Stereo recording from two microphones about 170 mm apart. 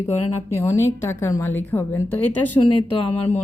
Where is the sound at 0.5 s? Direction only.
15° left (ahead or behind).